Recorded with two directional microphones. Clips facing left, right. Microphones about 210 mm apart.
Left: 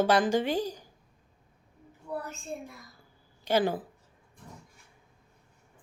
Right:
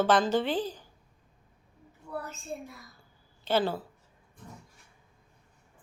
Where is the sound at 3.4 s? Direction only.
15° left (ahead or behind).